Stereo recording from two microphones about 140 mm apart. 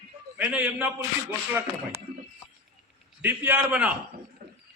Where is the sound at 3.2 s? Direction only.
15° right (ahead or behind).